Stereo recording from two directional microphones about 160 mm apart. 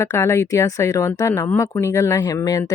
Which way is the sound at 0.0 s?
20° left (ahead or behind).